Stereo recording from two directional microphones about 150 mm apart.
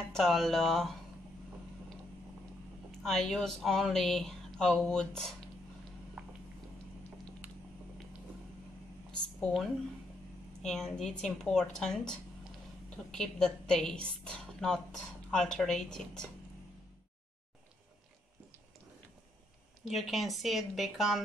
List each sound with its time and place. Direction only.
0.1 s speech: centre (ahead or behind)
3.0 s speech: 5° left (ahead or behind)
6.2 s a sound: 5° right (ahead or behind)
9.4 s speech: centre (ahead or behind)
19.9 s speech: centre (ahead or behind)